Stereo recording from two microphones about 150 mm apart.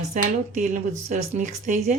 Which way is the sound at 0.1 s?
65° right (ahead or behind).